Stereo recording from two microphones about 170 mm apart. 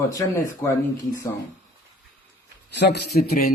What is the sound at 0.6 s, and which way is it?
Speech, 15° left (ahead or behind).